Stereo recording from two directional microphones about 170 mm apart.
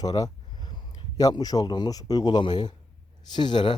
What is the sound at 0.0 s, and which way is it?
Speech, 25° left (ahead or behind).